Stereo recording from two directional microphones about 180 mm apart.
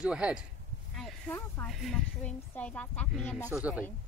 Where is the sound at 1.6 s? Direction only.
Centre (ahead or behind).